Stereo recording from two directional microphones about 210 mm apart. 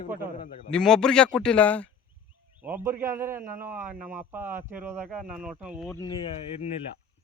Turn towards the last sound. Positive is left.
turn(degrees=25)  # may be behind; listen again after turning